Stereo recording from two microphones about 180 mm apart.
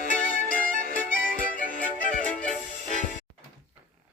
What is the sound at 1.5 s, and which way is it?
Music, 50° left (ahead or behind).